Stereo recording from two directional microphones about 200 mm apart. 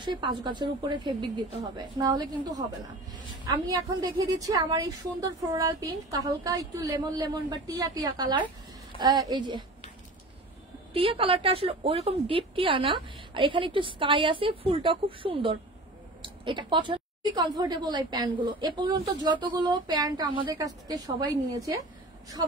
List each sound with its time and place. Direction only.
0.0 s a woman's voice: 25° right (ahead or behind)
10.9 s a woman's voice: 30° right (ahead or behind)